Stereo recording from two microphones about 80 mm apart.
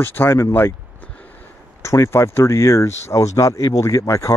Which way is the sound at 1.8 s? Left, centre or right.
Left.